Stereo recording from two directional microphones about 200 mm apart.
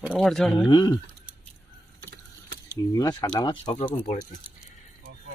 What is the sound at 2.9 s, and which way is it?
Speech, 20° left (ahead or behind).